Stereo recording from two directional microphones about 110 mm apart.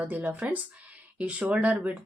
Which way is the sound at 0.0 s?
15° right (ahead or behind).